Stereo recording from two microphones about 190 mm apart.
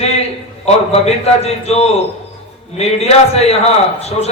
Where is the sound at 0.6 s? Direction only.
35° left (ahead or behind).